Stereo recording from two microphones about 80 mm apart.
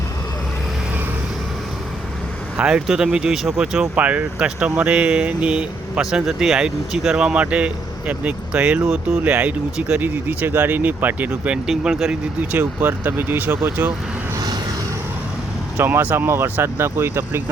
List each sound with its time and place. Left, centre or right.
2.6 s speech: centre
11.6 s speech: centre
12.5 s speech: right
14.3 s vehicle: right
15.8 s speech: right